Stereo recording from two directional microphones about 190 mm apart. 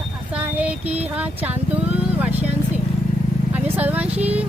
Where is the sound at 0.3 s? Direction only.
5° right (ahead or behind).